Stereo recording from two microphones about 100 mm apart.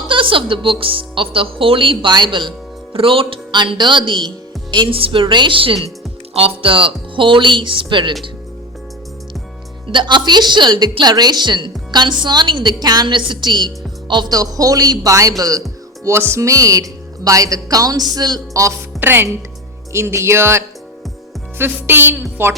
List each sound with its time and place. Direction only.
0.1 s speech: 60° right (ahead or behind)
2.9 s speech: 65° right (ahead or behind)
9.9 s a woman's voice: 50° right (ahead or behind)
16.0 s speech: 25° right (ahead or behind)
18.9 s a woman's voice: 20° right (ahead or behind)